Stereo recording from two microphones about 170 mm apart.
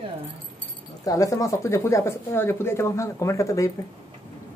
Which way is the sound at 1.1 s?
20° left (ahead or behind).